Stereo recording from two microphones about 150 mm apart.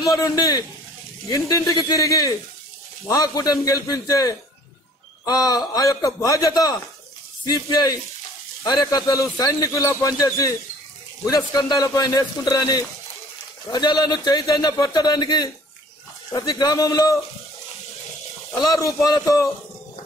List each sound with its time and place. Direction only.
0.0 s a man's voice: 25° left (ahead or behind)
18.6 s a man's voice: 20° left (ahead or behind)